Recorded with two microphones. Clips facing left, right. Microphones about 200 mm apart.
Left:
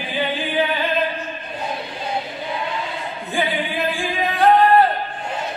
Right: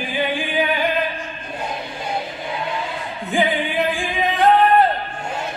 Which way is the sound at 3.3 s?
15° right (ahead or behind).